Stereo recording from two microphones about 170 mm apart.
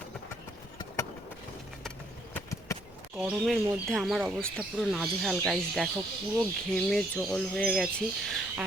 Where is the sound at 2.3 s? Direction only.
20° left (ahead or behind).